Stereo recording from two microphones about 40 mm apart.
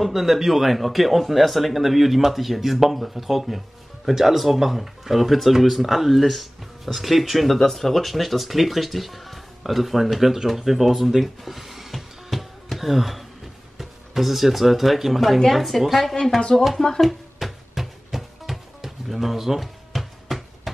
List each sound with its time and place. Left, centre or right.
0.0 s speech: centre
16.7 s speech: centre
17.0 s music: centre